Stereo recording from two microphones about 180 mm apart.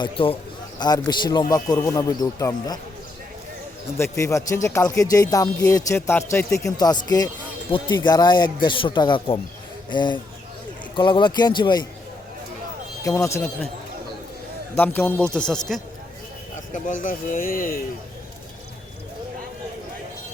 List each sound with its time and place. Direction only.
0.0 s speech: 30° left (ahead or behind)
3.9 s speech: 15° left (ahead or behind)
13.1 s speech: 15° left (ahead or behind)
14.8 s speech: 10° left (ahead or behind)
16.7 s speech: 45° left (ahead or behind)